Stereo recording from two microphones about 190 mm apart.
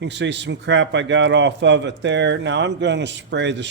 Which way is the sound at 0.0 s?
65° right (ahead or behind).